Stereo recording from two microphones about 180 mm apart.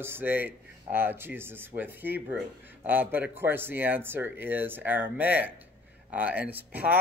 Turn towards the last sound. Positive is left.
turn(degrees=-10)  # may be behind; listen again after turning